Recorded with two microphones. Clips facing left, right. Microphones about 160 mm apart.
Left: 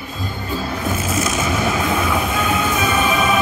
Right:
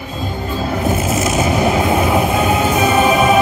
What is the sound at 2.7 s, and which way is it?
Music, 30° right (ahead or behind).